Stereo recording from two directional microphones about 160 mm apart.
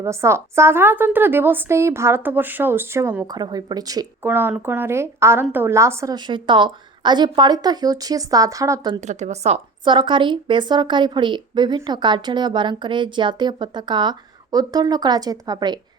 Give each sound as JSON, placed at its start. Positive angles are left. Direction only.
{"t": 0.0, "sound": "speech", "side_deg": -15}
{"t": 3.2, "sound": "a woman's voice", "side_deg": -25}
{"t": 4.3, "sound": "a woman's voice", "side_deg": -10}
{"t": 9.0, "sound": "a woman's voice", "side_deg": -45}
{"t": 9.8, "sound": "a woman's voice", "side_deg": -30}